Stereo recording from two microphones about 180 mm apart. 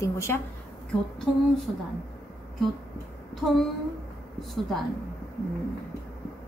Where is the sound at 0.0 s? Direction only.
15° left (ahead or behind).